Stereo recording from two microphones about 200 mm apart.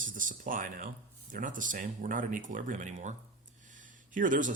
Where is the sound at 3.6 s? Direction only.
40° right (ahead or behind).